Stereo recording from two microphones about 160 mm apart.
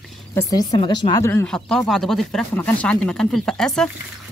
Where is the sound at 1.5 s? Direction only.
5° left (ahead or behind).